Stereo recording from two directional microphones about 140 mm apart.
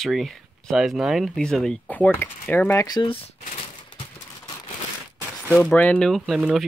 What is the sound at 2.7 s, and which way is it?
Speech, 30° left (ahead or behind).